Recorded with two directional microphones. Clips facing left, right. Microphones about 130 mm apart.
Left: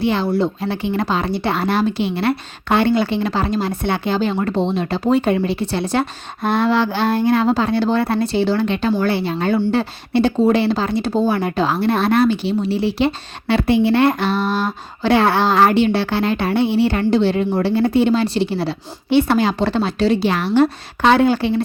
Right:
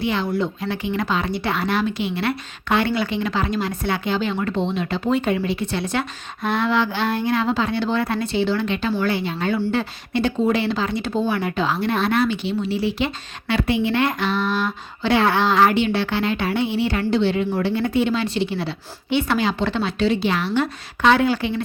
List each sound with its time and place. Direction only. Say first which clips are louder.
0.0 s speech: left 4 dB; 35° left (ahead or behind)